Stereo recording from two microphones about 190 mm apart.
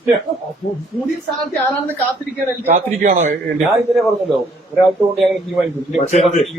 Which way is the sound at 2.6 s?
35° right (ahead or behind).